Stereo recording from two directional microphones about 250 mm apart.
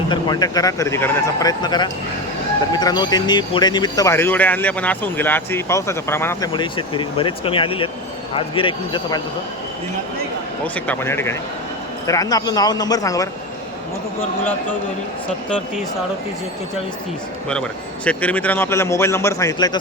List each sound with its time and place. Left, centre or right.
0.1 s a man's voice: centre
10.8 s speech: centre
17.5 s speech: centre